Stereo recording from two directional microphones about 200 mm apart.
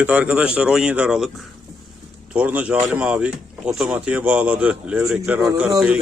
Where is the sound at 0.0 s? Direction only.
5° right (ahead or behind).